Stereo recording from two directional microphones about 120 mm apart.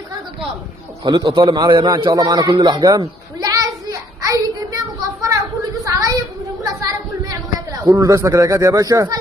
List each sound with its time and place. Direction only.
1.0 s a man's voice: 35° right (ahead or behind)
3.3 s a sound: 30° right (ahead or behind)
7.8 s speech: 30° right (ahead or behind)